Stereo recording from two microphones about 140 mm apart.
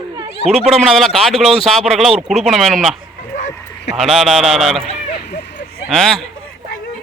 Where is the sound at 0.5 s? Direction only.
Centre (ahead or behind).